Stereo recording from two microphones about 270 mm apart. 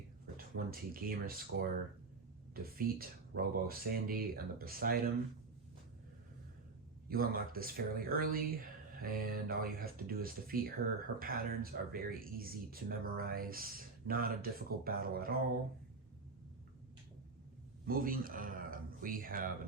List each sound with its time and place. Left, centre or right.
0.3 s speech: right
2.6 s speech: right
7.1 s speech: right
17.8 s speech: right